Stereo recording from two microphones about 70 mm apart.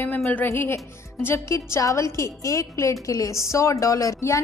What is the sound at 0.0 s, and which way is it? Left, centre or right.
A woman's voice, left.